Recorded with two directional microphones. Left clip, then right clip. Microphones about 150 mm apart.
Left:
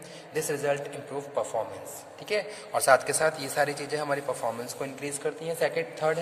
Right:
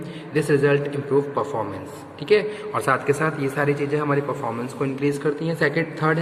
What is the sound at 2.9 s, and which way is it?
A man's voice, 60° left (ahead or behind).